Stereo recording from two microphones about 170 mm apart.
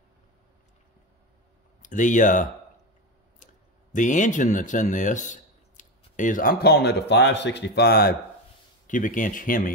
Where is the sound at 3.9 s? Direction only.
45° left (ahead or behind); by 8.1 s 65° left (ahead or behind).